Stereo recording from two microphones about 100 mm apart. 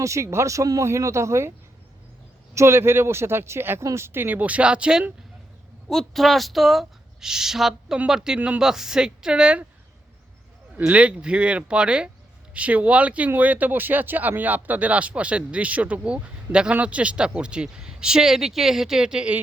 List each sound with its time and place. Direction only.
0.0 s speech: 30° right (ahead or behind)
2.6 s speech: 25° right (ahead or behind); by 5.1 s 10° right (ahead or behind)
5.9 s speech: centre (ahead or behind)
10.8 s speech: 15° right (ahead or behind)